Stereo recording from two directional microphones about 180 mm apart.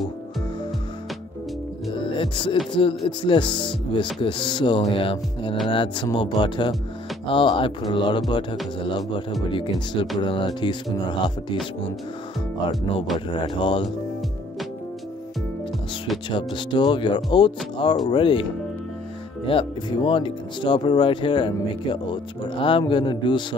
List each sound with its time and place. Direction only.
2.1 s speech: 30° left (ahead or behind)
13.3 s speech: 25° left (ahead or behind)
16.3 s speech: 25° left (ahead or behind)